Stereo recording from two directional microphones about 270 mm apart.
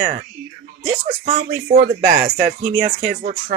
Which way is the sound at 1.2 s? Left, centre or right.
Right.